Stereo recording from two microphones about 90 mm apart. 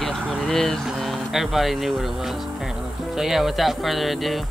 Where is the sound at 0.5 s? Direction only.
5° left (ahead or behind).